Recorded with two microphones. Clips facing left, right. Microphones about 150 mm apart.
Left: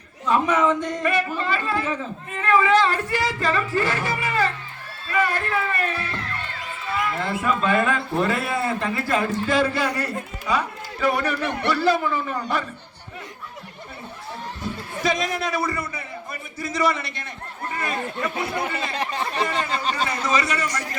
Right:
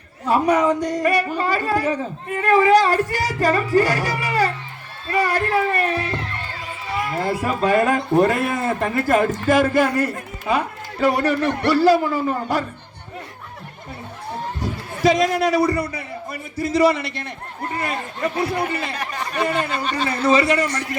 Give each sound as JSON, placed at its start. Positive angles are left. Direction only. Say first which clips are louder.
{"t": 0.3, "sound": "a man's voice", "louder": "right 3 dB", "side_deg": -40}
{"t": 10.6, "sound": "speech", "louder": "right 4 dB", "side_deg": -30}
{"t": 11.4, "sound": "speech", "louder": "right 6 dB", "side_deg": -45}
{"t": 15.3, "sound": "a man's voice", "louder": "right 7 dB", "side_deg": -35}
{"t": 18.4, "sound": "speech", "louder": "right 4 dB", "side_deg": 25}
{"t": 20.2, "sound": "a man's voice", "louder": "right 8 dB", "side_deg": -30}